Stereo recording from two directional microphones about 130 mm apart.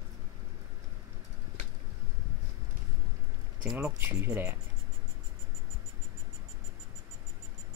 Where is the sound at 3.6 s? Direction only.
10° right (ahead or behind).